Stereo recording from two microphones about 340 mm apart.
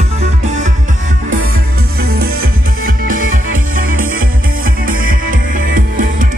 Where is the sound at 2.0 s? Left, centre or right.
Right.